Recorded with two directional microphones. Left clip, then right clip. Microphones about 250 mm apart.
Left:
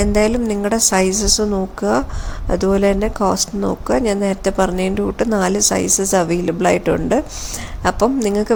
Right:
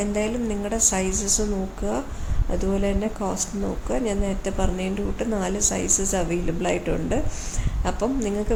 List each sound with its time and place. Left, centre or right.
0.0 s speech: left